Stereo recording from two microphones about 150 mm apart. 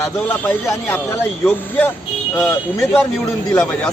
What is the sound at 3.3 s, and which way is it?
Speech, 5° left (ahead or behind).